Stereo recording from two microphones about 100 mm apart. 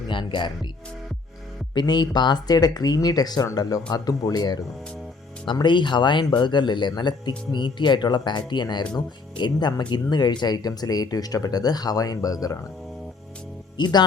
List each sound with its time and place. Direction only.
0.1 s speech: 55° left (ahead or behind)
1.7 s speech: 50° left (ahead or behind)
5.5 s speech: 50° left (ahead or behind)
13.7 s speech: 45° left (ahead or behind)